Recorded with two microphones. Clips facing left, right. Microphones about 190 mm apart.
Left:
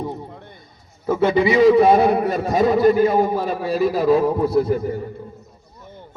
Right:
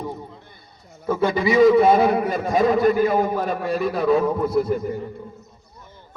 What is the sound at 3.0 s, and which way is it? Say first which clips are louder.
Speech: left 3 dB; 25° left (ahead or behind).